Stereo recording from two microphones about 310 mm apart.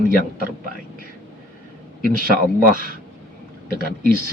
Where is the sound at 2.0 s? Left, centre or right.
Right.